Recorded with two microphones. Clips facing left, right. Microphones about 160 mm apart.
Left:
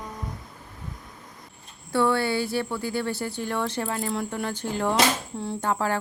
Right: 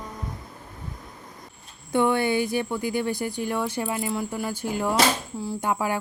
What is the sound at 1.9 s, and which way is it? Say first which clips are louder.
Speech: right 1 dB; 15° right (ahead or behind).